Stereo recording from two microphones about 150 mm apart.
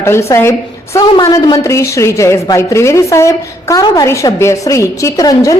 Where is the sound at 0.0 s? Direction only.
15° left (ahead or behind).